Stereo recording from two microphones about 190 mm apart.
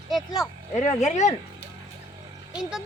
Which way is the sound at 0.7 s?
35° left (ahead or behind).